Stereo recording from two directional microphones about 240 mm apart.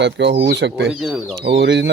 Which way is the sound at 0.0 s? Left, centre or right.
Right.